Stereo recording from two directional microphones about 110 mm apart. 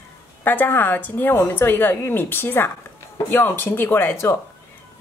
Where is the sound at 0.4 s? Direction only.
20° left (ahead or behind).